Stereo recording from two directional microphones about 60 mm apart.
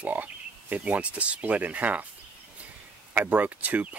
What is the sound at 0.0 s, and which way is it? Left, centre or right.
Speech, right.